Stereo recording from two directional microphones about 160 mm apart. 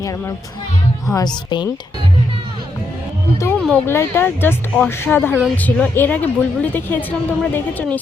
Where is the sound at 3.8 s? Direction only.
15° left (ahead or behind).